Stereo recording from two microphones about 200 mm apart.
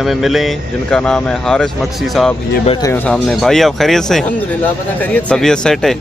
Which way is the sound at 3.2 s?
Centre (ahead or behind).